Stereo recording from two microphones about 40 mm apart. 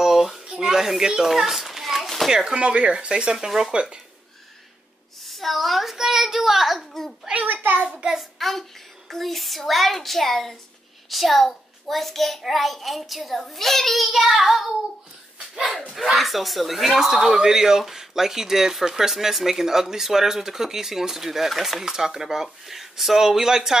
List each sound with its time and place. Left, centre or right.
0.0 s a sound: centre
2.5 s speech: right
5.2 s a woman's voice: centre
7.4 s a sound: right
7.9 s speech: centre
8.2 s a child's voice: centre
15.9 s speech: centre